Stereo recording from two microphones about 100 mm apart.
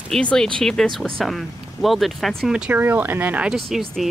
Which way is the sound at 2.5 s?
15° right (ahead or behind).